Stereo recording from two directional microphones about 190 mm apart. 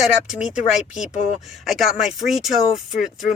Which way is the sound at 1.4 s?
Centre (ahead or behind).